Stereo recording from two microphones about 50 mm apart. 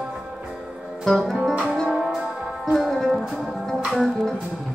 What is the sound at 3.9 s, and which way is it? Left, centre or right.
Music, centre.